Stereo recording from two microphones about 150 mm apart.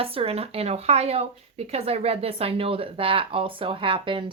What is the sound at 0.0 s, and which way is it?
A woman's voice, 40° right (ahead or behind).